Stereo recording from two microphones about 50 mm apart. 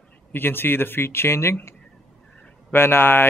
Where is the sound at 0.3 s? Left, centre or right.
Left.